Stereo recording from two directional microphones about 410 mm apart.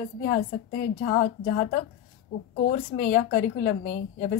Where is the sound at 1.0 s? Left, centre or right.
Centre.